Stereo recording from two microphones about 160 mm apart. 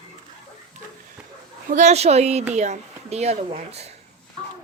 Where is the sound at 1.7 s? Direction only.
45° right (ahead or behind).